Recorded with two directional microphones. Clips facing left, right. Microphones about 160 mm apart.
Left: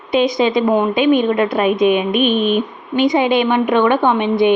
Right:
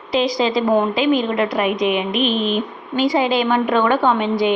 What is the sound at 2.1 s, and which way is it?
Speech, 90° right.